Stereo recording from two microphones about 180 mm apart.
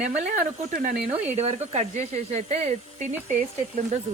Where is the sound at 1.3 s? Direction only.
40° right (ahead or behind).